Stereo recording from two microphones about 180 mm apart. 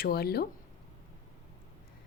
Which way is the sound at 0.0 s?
60° left (ahead or behind).